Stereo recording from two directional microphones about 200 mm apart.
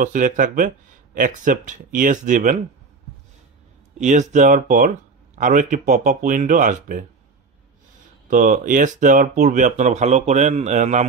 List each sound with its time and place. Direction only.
0.0 s speech: 40° right (ahead or behind)
4.0 s speech: 35° right (ahead or behind)
8.3 s speech: 40° right (ahead or behind)